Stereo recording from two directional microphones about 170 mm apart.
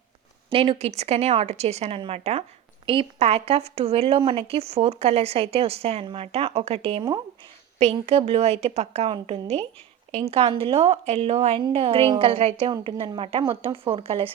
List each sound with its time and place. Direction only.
0.5 s speech: 35° right (ahead or behind)